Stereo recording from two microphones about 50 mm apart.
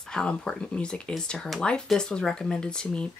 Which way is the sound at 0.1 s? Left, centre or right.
Centre.